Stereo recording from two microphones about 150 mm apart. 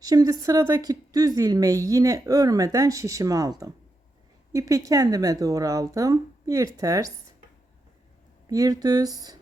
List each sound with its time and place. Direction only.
0.0 s a woman's voice: 25° right (ahead or behind)
8.4 s a woman's voice: 25° right (ahead or behind)